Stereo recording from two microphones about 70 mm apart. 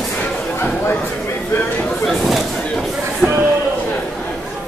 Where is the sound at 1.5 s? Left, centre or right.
Left.